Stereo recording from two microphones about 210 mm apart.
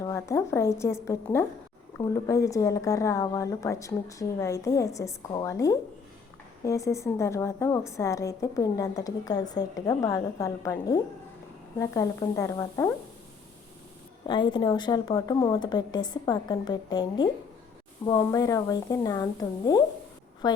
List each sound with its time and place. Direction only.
0.0 s a woman's voice: 15° left (ahead or behind)
14.3 s a woman's voice: 20° left (ahead or behind)